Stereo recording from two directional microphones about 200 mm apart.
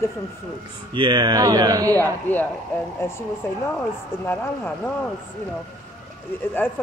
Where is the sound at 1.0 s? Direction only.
25° right (ahead or behind).